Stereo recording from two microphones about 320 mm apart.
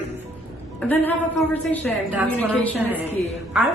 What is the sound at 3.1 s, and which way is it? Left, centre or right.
Speech, centre.